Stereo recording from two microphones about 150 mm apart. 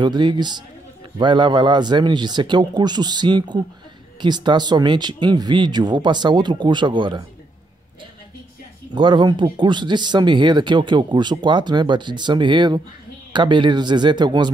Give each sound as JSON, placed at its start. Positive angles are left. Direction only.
{"t": 0.0, "sound": "speech", "side_deg": -30}
{"t": 8.9, "sound": "speech", "side_deg": -30}